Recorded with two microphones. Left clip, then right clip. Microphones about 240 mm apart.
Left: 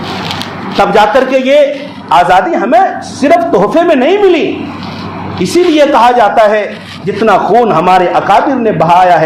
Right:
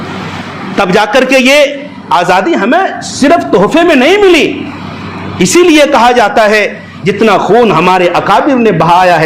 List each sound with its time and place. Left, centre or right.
0.8 s a man's voice: right